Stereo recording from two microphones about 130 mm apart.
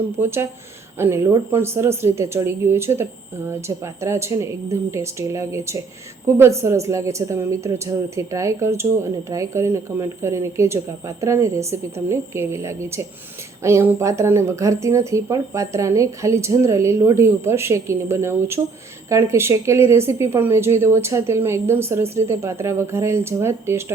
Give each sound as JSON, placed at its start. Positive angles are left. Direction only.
{"t": 0.2, "sound": "speech", "side_deg": -20}